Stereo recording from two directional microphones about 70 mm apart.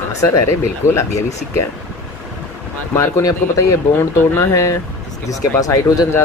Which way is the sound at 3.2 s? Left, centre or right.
Left.